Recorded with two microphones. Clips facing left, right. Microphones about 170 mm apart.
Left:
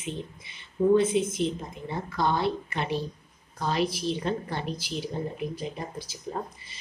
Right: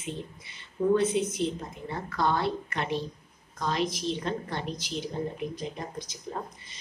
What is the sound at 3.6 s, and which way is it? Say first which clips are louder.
A woman's voice: left 2 dB; 10° left (ahead or behind).